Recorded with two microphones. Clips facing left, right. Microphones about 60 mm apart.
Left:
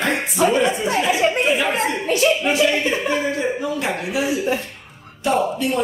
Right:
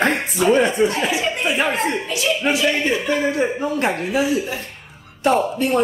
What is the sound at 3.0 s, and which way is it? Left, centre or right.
Speech, centre.